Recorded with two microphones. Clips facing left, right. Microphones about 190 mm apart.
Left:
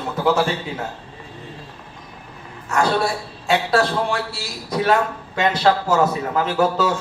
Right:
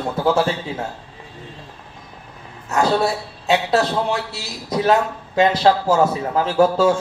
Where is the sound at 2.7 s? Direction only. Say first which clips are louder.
Right 2 dB; 25° right (ahead or behind).